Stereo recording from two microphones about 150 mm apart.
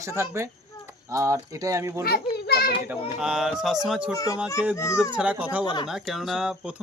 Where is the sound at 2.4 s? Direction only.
90° left.